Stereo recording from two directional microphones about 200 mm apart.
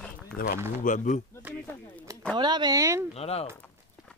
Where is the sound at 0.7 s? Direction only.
40° left (ahead or behind).